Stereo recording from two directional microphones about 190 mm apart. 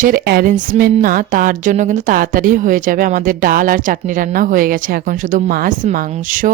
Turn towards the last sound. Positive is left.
turn(degrees=-45)  # may be behind; listen again after turning